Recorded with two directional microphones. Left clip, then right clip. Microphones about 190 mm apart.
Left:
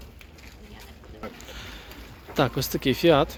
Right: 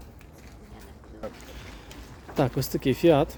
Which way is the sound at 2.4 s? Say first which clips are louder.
Left 2 dB; 15° right (ahead or behind).